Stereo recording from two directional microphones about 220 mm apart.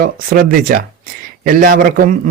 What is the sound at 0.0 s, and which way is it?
A man's voice, 40° right (ahead or behind).